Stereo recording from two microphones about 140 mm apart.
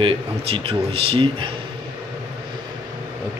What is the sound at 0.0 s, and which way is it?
Speech, 40° right (ahead or behind).